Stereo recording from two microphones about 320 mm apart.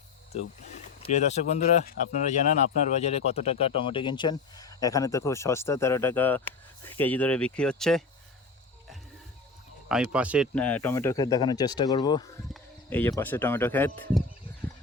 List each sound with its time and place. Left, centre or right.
1.1 s speech: left; by 8.0 s centre
9.9 s speech: centre